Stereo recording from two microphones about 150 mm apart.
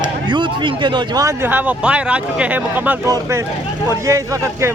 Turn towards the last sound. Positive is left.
turn(degrees=-20)  # may be behind; listen again after turning